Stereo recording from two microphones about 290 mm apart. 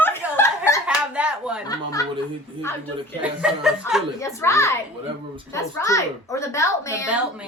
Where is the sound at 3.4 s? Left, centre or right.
Centre.